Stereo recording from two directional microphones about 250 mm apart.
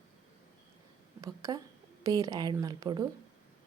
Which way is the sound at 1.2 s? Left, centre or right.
Centre.